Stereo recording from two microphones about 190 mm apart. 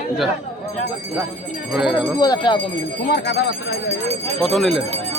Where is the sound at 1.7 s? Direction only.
5° right (ahead or behind).